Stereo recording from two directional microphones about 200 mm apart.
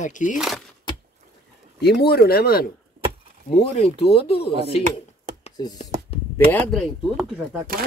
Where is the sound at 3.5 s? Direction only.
30° left (ahead or behind).